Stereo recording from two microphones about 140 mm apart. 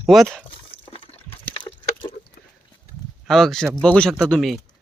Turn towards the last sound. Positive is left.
turn(degrees=5)  # may be behind; listen again after turning